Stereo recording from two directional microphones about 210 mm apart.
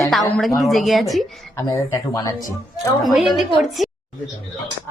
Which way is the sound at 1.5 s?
15° left (ahead or behind).